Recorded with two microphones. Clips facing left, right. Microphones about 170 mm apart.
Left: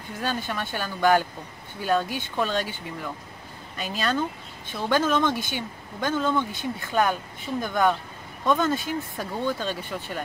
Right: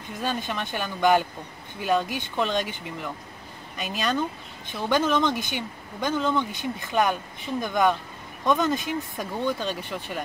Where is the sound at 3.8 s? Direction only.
10° right (ahead or behind).